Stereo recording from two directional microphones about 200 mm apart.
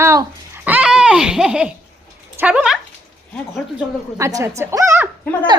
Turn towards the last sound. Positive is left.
turn(degrees=-15)  # may be behind; listen again after turning